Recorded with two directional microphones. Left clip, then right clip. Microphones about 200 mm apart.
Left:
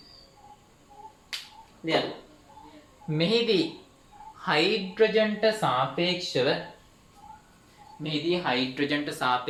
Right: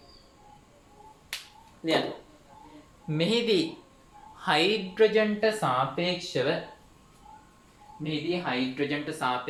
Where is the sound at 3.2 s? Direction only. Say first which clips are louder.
Left 1 dB; 30° right (ahead or behind).